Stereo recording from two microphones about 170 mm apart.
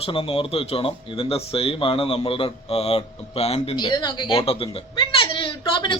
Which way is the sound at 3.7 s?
25° left (ahead or behind).